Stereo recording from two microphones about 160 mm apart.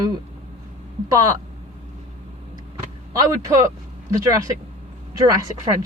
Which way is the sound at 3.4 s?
20° right (ahead or behind).